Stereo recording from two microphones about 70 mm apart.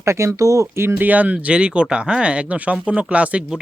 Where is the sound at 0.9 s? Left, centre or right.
Right.